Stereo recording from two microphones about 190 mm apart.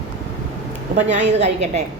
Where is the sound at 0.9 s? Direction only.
35° right (ahead or behind).